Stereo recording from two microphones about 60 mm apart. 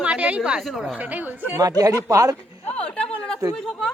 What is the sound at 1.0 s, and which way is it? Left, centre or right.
Speech, right.